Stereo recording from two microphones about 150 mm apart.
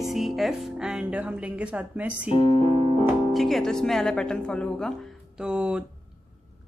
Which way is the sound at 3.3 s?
Centre (ahead or behind).